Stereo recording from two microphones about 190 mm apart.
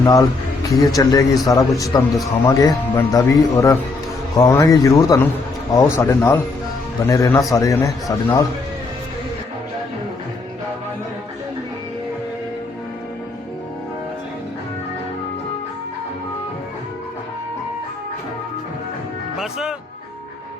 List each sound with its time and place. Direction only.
0.0 s a sound: 20° left (ahead or behind)
0.9 s speech: 20° left (ahead or behind)
19.4 s music: 5° right (ahead or behind)